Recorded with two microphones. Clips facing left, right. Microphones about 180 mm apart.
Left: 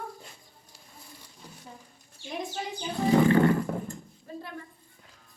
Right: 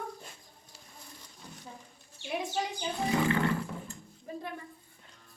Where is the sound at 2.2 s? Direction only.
20° right (ahead or behind).